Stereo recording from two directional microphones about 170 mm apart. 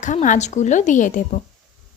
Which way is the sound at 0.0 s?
45° left (ahead or behind).